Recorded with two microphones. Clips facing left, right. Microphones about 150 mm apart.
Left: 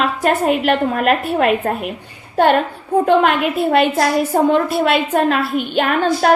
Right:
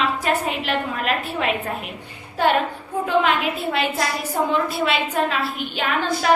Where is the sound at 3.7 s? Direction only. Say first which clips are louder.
Left 10 dB; 55° left (ahead or behind).